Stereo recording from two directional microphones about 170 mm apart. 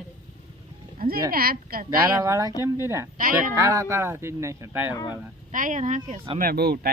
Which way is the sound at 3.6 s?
20° right (ahead or behind).